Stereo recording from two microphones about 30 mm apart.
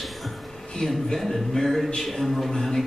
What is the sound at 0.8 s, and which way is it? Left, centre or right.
Speech, centre.